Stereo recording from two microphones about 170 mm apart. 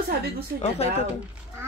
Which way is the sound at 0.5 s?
35° left (ahead or behind).